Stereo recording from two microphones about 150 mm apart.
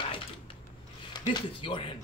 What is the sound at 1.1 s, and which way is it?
Speech, 30° left (ahead or behind).